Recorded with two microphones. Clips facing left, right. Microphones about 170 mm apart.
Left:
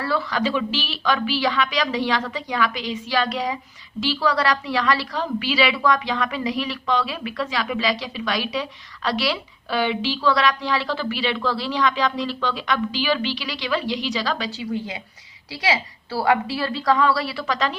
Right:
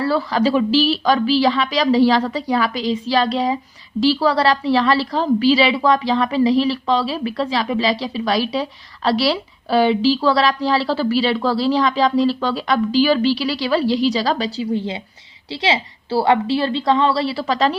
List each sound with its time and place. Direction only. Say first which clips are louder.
0.0 s a woman's voice: right 6 dB; 30° right (ahead or behind)